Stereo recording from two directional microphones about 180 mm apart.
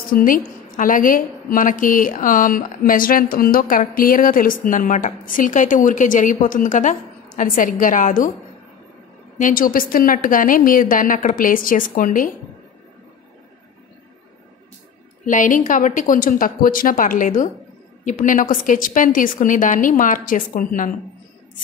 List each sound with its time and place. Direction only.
0.1 s a woman's voice: 50° left (ahead or behind)
9.4 s a woman's voice: 50° left (ahead or behind)
15.2 s a woman's voice: 45° left (ahead or behind)